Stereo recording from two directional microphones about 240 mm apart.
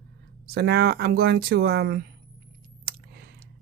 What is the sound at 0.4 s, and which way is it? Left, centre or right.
Speech, right.